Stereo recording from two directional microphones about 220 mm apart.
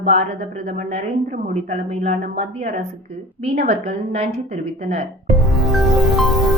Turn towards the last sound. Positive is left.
turn(degrees=0)  # may be behind; listen again after turning